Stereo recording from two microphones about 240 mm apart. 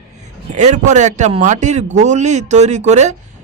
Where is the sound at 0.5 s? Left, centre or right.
Right.